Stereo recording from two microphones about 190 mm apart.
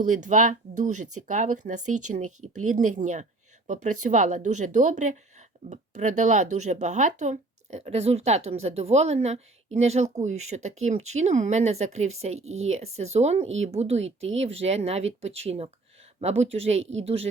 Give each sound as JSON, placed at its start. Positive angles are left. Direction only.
{"t": 0.0, "sound": "speech", "side_deg": -40}
{"t": 16.8, "sound": "speech", "side_deg": -85}